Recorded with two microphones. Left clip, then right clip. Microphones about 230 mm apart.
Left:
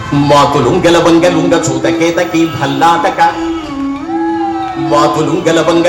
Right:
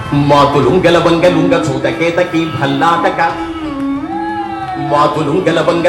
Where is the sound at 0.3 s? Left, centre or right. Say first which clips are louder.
Left 1 dB; left.